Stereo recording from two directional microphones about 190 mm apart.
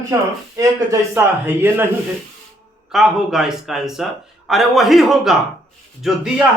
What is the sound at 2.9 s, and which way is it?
Speech, centre (ahead or behind).